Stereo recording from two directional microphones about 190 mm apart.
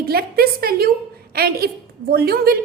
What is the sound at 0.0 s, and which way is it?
A woman's voice, 55° right (ahead or behind).